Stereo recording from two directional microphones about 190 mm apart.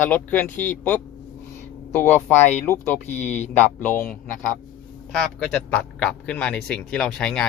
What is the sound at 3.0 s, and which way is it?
Speech, 35° left (ahead or behind).